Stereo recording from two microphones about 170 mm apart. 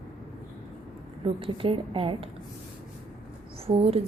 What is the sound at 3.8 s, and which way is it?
Speech, 35° right (ahead or behind).